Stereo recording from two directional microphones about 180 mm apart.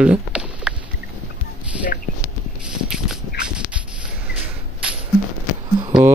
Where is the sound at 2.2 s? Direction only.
5° right (ahead or behind).